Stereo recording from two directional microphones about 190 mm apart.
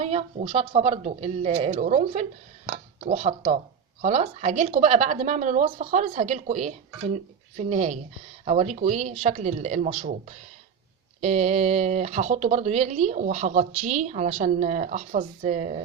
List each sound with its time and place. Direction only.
0.0 s speech: 35° right (ahead or behind)